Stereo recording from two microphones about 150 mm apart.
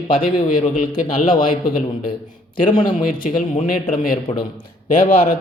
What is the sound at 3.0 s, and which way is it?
Speech, 70° left (ahead or behind).